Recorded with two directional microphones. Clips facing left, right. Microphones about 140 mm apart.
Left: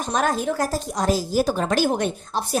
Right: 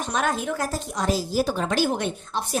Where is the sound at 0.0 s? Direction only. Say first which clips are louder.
Left 3 dB; 40° left (ahead or behind).